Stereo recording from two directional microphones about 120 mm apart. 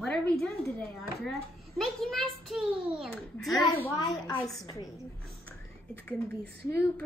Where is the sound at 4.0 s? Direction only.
35° left (ahead or behind).